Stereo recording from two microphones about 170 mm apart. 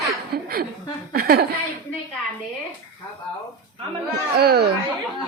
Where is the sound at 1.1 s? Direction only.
60° right (ahead or behind).